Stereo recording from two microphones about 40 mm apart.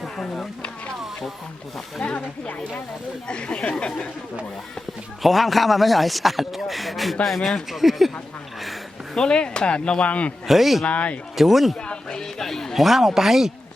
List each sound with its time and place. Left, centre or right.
2.1 s speech: left
3.2 s speech: left
5.2 s speech: centre
9.1 s speech: left
10.4 s speech: centre
10.8 s speech: left
11.3 s speech: centre
11.8 s a sound: left
12.4 s chatter: centre
12.7 s speech: centre